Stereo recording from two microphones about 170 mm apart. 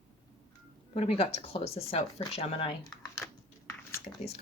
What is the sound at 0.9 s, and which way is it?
A woman's voice, 35° left (ahead or behind).